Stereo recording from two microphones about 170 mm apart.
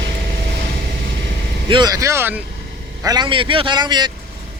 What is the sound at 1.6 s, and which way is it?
Vehicle, 25° right (ahead or behind).